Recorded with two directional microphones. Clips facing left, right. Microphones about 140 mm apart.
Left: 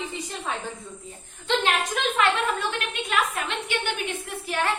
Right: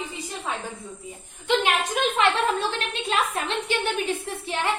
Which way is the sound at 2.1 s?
30° right (ahead or behind).